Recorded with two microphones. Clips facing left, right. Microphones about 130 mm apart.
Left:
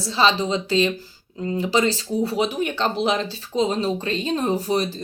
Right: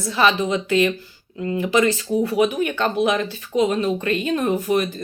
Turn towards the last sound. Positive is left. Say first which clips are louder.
# right 2 dB
turn(degrees=30)  # may be behind; listen again after turning